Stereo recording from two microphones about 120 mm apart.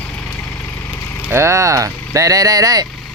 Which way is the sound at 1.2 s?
20° right (ahead or behind).